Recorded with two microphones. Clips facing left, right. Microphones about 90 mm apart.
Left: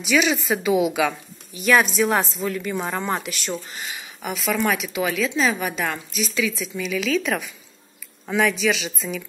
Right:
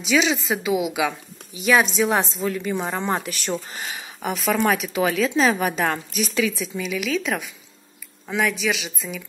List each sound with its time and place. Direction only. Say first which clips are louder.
0.0 s a woman's voice: even; 25° right (ahead or behind)
0.4 s a woman's voice: left 3 dB; 5° right (ahead or behind); by 6.9 s 30° right (ahead or behind)
6.9 s a woman's voice: left 2 dB; 15° right (ahead or behind)